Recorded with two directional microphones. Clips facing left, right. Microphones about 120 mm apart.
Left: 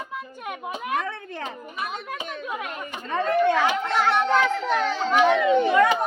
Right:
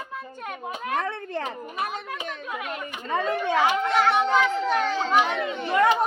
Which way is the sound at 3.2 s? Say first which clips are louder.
Left 3 dB; 10° right (ahead or behind).